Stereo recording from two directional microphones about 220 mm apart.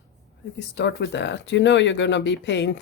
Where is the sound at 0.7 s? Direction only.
50° left (ahead or behind).